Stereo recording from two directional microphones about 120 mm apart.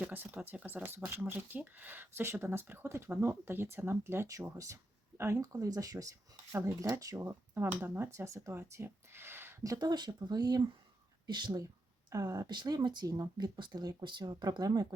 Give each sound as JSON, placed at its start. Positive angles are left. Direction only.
{"t": 0.0, "sound": "speech", "side_deg": -15}
{"t": 9.7, "sound": "speech", "side_deg": -35}